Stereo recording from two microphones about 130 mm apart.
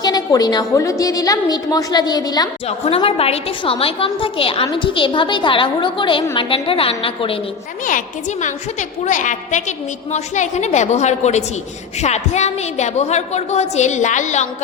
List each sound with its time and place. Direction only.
0.0 s a woman's voice: 30° left (ahead or behind)
2.6 s a woman's voice: 50° left (ahead or behind)
7.9 s a woman's voice: 80° left